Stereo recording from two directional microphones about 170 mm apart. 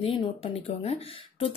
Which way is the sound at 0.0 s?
35° left (ahead or behind).